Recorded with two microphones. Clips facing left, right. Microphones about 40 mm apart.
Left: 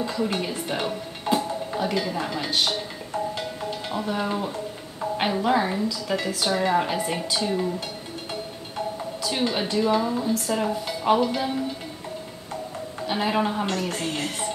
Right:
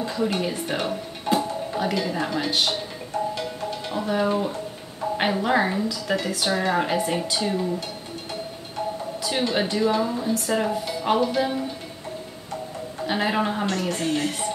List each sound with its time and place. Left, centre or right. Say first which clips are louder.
0.0 s speech: right 1 dB; centre
3.9 s speech: right 4 dB; centre
9.5 s speech: even; centre
13.0 s speech: right 1 dB; centre
13.9 s speech: right 3 dB; centre